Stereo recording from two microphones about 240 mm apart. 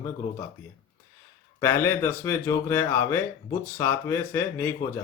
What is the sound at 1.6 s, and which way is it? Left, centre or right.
Speech, centre.